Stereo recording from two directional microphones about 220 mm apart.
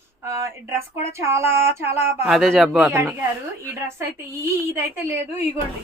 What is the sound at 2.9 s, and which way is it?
Speech, 10° right (ahead or behind).